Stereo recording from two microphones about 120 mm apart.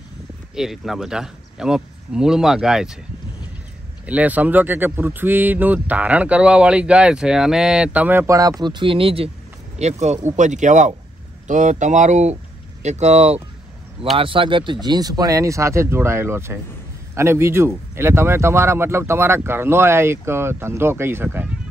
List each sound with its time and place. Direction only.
0.6 s speech: 5° right (ahead or behind)
4.0 s speech: 10° right (ahead or behind)
8.4 s speech: 30° right (ahead or behind); by 9.3 s 50° right (ahead or behind)
9.8 s speech: 70° right (ahead or behind)
10.3 s speech: 90° right
12.8 s speech: 70° right (ahead or behind)
14.1 s speech: 45° right (ahead or behind); by 21.5 s 20° right (ahead or behind)